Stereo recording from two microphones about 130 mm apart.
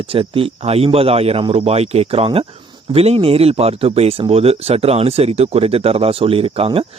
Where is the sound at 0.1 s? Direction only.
45° right (ahead or behind).